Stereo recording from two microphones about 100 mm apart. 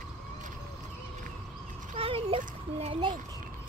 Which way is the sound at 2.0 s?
70° right (ahead or behind).